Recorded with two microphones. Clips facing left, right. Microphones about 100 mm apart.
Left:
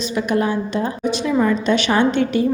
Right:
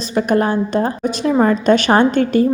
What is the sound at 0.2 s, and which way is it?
A woman's voice, 45° right (ahead or behind).